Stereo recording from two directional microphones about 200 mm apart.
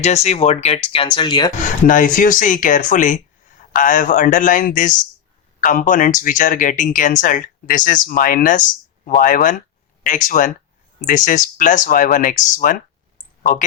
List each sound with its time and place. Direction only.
0.0 s speech: 35° left (ahead or behind)
1.9 s speech: 40° left (ahead or behind)